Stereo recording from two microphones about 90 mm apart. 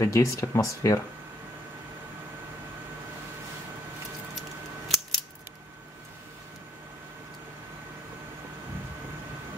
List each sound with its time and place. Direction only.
0.0 s speech: 35° left (ahead or behind)
4.4 s scissors: centre (ahead or behind)